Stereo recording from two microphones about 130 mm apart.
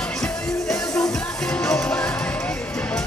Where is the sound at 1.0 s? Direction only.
5° left (ahead or behind).